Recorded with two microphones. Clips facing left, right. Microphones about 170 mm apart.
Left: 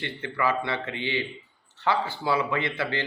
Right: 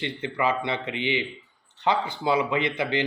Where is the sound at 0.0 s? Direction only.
20° right (ahead or behind).